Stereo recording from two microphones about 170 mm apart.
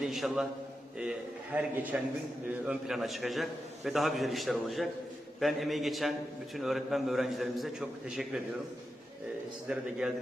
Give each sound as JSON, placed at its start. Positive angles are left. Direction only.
{"t": 0.0, "sound": "a man's voice", "side_deg": 0}
{"t": 1.5, "sound": "a man's voice", "side_deg": -10}
{"t": 9.6, "sound": "a man's voice", "side_deg": -5}